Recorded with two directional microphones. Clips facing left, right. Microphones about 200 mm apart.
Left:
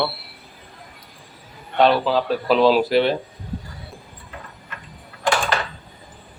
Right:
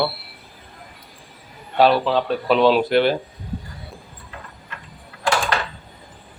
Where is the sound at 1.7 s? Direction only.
Centre (ahead or behind).